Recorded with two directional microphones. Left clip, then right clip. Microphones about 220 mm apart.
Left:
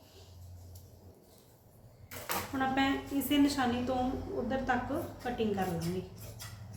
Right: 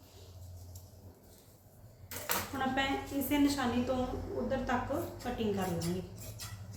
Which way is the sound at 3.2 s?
35° left (ahead or behind).